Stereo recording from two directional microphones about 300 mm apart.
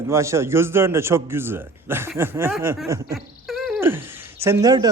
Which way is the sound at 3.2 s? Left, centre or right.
Centre.